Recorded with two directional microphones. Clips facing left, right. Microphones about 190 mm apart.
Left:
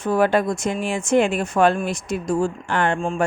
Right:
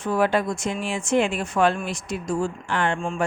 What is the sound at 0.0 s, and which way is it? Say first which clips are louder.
Speech: left 3 dB; 45° left (ahead or behind).